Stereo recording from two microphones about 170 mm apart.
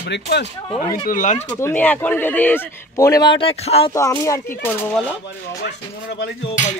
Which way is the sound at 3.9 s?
20° left (ahead or behind).